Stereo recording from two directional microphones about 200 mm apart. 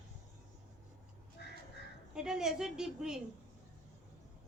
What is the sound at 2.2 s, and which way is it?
A woman's voice, 5° right (ahead or behind).